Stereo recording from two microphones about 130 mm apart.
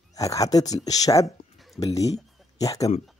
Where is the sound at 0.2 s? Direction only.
25° left (ahead or behind).